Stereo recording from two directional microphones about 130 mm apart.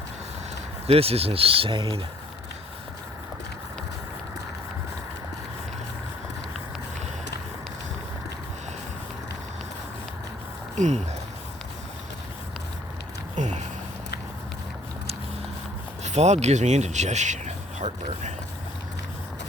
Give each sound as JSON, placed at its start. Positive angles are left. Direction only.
{"t": 0.9, "sound": "speech", "side_deg": -50}
{"t": 10.8, "sound": "speech", "side_deg": -65}
{"t": 13.3, "sound": "a sound", "side_deg": -65}
{"t": 16.0, "sound": "speech", "side_deg": -60}